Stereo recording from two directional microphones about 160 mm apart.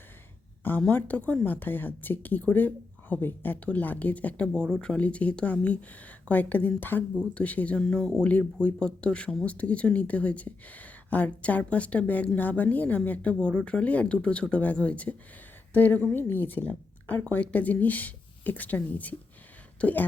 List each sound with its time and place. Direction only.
0.6 s a woman's voice: 10° left (ahead or behind)